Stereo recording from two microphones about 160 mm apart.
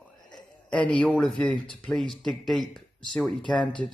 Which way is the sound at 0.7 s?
10° left (ahead or behind).